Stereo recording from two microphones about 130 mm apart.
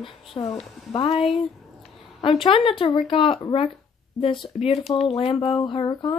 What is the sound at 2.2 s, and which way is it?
Speech, 45° left (ahead or behind).